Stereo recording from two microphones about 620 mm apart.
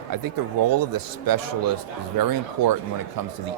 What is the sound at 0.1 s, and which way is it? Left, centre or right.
Speech, right.